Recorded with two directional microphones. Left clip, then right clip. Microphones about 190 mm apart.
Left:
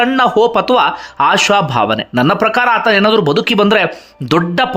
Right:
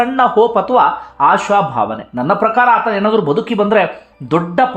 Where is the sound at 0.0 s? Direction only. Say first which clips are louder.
Left 1 dB; 20° left (ahead or behind).